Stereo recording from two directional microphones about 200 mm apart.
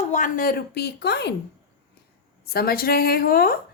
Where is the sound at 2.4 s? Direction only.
50° left (ahead or behind).